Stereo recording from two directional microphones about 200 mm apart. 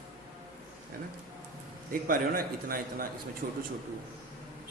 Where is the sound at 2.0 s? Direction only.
45° right (ahead or behind).